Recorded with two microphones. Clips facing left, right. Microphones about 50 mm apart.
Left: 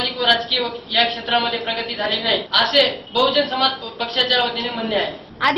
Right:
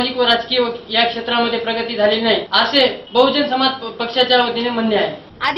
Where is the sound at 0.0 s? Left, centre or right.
Centre.